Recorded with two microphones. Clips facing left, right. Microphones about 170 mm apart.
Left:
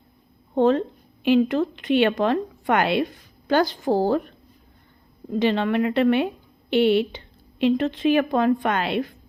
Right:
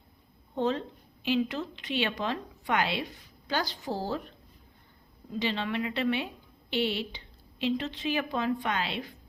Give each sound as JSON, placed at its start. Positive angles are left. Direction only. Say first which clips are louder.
{"t": 0.5, "sound": "a woman's voice", "louder": "left 10 dB", "side_deg": 55}